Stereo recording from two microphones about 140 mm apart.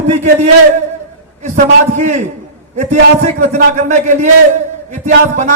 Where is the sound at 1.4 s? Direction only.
65° right (ahead or behind).